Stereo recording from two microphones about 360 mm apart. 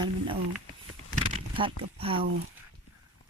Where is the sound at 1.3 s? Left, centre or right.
Centre.